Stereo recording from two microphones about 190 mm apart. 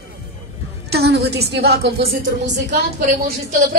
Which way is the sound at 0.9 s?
60° right (ahead or behind).